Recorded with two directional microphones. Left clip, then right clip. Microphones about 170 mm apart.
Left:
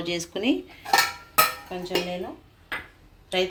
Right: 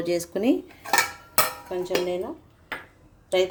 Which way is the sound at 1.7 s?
75° right (ahead or behind).